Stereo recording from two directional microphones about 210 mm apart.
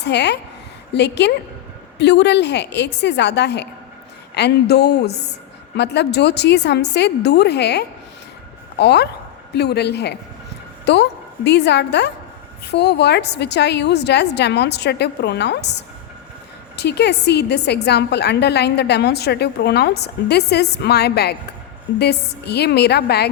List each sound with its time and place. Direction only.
0.0 s a woman's voice: 55° left (ahead or behind)